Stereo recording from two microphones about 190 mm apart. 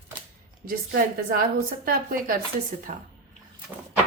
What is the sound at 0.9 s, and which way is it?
A woman's voice, 50° right (ahead or behind).